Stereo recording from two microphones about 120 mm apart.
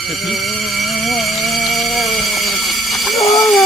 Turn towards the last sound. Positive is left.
turn(degrees=0)  # may be behind; listen again after turning